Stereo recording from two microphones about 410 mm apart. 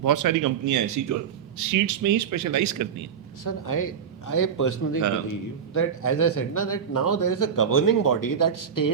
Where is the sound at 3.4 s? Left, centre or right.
Left.